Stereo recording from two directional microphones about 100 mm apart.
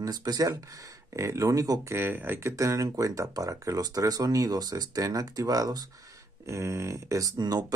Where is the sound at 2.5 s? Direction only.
35° right (ahead or behind).